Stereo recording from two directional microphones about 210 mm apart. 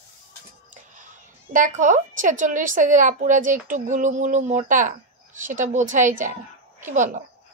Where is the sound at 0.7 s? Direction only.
35° right (ahead or behind).